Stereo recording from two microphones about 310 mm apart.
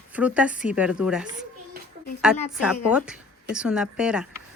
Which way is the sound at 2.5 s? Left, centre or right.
Centre.